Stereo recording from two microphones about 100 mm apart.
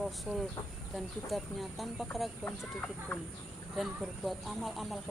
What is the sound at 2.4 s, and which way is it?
Speech, 20° left (ahead or behind).